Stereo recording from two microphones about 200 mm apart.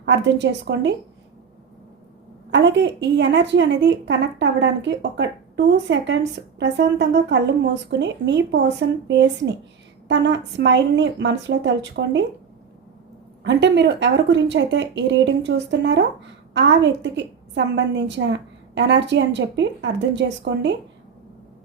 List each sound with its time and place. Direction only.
0.0 s a woman's voice: 65° right (ahead or behind)
2.5 s a woman's voice: 65° right (ahead or behind)
13.4 s a woman's voice: 60° right (ahead or behind)